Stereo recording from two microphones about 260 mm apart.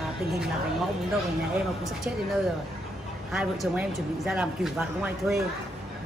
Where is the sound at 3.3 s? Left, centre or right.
Centre.